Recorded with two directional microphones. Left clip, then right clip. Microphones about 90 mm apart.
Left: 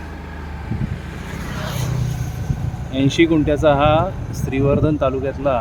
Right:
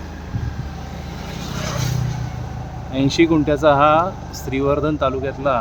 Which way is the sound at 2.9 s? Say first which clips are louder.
Even; centre (ahead or behind).